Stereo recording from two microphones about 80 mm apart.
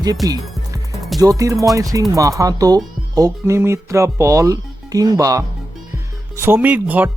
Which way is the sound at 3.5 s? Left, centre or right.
Right.